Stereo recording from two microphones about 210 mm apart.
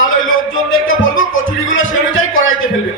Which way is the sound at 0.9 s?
70° left (ahead or behind).